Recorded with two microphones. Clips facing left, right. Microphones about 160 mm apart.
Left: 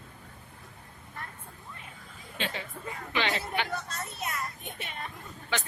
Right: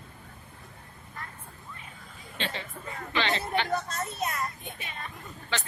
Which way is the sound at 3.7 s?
45° right (ahead or behind).